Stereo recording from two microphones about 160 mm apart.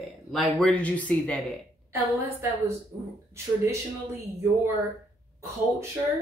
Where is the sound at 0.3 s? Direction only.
Centre (ahead or behind).